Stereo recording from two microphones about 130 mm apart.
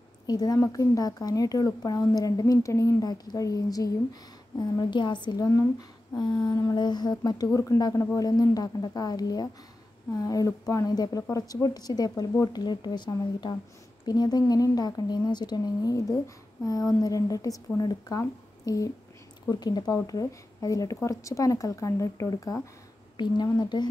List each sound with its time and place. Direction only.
0.3 s speech: 30° left (ahead or behind)